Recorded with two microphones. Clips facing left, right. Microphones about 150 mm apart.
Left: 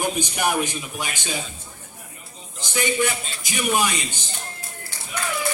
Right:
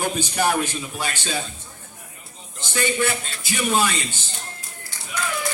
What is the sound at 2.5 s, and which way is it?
A man's voice, 15° left (ahead or behind).